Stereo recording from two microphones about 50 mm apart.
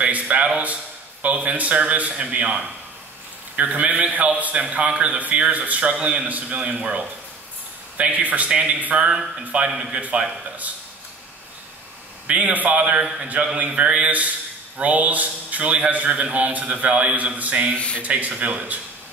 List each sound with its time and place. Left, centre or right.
0.0 s a man's voice: right
12.3 s a man's voice: right
17.7 s speech: left
18.0 s a man's voice: right